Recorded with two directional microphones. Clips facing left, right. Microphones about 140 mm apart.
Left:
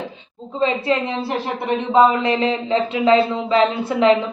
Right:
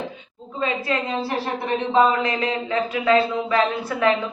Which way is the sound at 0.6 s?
25° left (ahead or behind).